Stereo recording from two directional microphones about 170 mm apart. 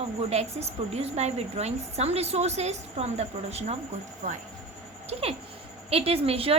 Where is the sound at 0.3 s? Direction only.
35° right (ahead or behind).